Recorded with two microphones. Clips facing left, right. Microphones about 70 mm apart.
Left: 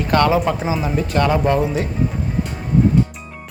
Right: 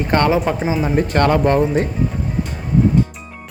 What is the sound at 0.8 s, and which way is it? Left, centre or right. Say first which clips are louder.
Speech: right 5 dB; right.